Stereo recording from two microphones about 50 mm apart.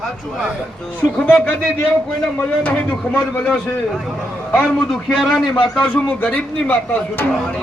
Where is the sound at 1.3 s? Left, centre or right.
Left.